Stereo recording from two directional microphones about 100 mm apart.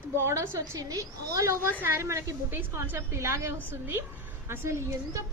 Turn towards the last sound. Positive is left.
turn(degrees=-25)  # may be behind; listen again after turning